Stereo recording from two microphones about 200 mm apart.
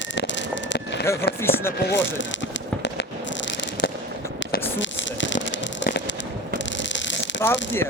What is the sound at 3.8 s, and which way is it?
Fireworks, 65° left (ahead or behind).